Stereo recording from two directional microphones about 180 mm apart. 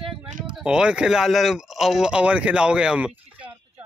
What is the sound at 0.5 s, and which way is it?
Speech, 5° right (ahead or behind).